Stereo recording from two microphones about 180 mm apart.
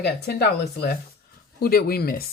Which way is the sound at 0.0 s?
60° left (ahead or behind).